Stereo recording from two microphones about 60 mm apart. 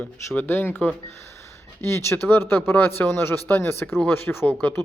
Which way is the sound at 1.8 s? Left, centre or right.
Left.